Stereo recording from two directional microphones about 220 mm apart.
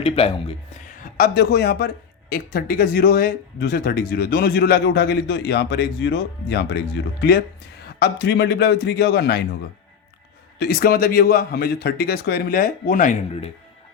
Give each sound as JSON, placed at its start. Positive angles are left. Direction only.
{"t": 0.0, "sound": "speech", "side_deg": 25}
{"t": 1.0, "sound": "speech", "side_deg": 40}
{"t": 10.6, "sound": "speech", "side_deg": 45}